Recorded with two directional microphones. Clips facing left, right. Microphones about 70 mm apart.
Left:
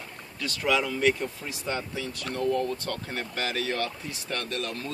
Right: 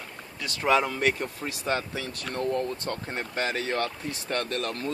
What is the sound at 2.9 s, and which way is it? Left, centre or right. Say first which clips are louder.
Speech: right 1 dB; right.